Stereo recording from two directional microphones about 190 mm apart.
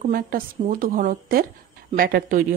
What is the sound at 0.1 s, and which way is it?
Speech, 50° right (ahead or behind).